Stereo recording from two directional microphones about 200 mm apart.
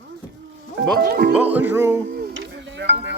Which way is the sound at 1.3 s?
10° right (ahead or behind).